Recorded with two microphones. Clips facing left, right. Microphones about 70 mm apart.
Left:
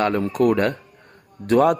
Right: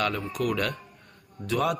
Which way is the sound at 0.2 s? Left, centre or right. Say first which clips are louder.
Left 10 dB; left.